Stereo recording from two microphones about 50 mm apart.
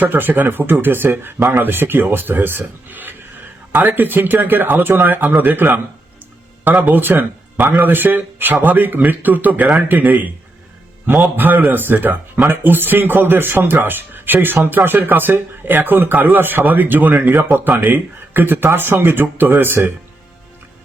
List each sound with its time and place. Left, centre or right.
0.0 s speech: right
6.8 s speech: right